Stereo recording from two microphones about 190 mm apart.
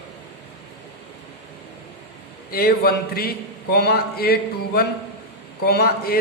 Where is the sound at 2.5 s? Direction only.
55° left (ahead or behind).